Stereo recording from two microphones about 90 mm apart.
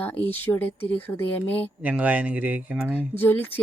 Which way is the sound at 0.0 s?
20° left (ahead or behind).